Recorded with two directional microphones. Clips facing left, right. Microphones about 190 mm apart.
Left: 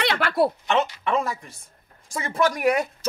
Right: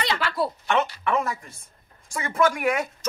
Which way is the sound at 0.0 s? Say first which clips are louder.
Left 4 dB; 60° left (ahead or behind).